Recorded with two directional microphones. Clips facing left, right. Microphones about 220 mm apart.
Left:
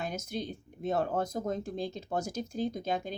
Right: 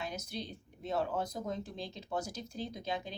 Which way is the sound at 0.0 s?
50° left (ahead or behind).